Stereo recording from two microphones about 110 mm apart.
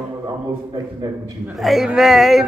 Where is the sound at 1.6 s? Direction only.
Centre (ahead or behind).